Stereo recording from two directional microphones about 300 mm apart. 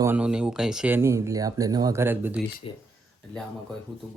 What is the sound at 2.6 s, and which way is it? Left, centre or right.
Speech, centre.